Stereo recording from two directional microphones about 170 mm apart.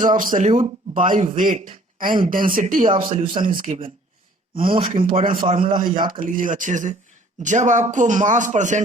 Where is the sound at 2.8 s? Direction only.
30° right (ahead or behind).